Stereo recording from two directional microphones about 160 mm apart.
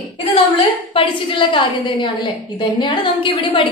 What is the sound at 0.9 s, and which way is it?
A woman's voice, 30° left (ahead or behind).